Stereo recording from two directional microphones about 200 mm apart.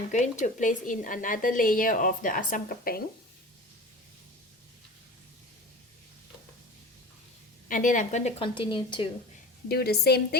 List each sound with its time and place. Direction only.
0.1 s a woman's voice: 40° left (ahead or behind)
7.7 s a woman's voice: 40° left (ahead or behind); by 9.0 s 25° left (ahead or behind)
9.6 s a woman's voice: 50° left (ahead or behind)